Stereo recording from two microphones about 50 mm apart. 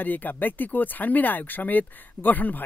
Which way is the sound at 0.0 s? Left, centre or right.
Left.